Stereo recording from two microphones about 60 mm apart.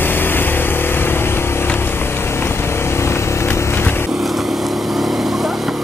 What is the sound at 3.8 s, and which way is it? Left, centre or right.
Vehicle, left.